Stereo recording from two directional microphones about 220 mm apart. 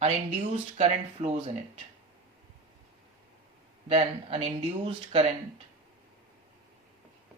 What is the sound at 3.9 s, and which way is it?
Speech, 25° right (ahead or behind).